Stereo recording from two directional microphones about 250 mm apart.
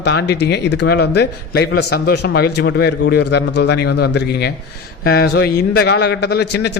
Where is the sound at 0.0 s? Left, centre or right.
Left.